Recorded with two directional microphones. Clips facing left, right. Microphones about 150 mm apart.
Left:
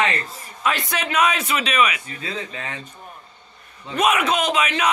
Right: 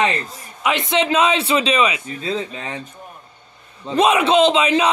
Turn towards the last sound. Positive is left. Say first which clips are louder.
# right 6 dB
turn(degrees=-30)  # may be behind; listen again after turning